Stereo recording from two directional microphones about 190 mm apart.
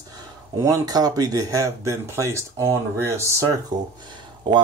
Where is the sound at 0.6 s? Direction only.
15° right (ahead or behind).